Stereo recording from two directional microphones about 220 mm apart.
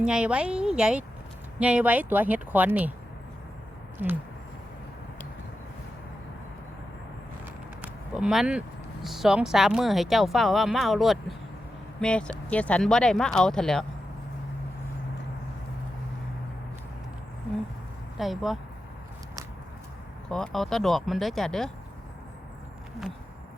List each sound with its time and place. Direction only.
0.0 s speech: 5° right (ahead or behind)
8.1 s speech: centre (ahead or behind)
18.2 s speech: centre (ahead or behind)
20.3 s speech: centre (ahead or behind)